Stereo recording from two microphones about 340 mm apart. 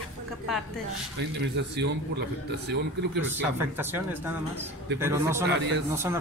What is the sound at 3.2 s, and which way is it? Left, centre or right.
A man's voice, centre.